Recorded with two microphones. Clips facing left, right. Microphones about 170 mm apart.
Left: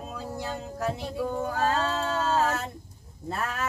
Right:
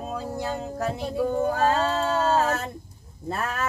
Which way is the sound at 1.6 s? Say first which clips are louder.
Right 4 dB; 80° right.